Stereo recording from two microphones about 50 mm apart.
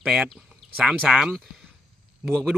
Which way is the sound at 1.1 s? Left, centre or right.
Centre.